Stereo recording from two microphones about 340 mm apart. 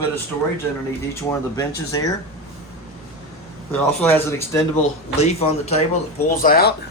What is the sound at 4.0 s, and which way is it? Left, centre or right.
Speech, centre.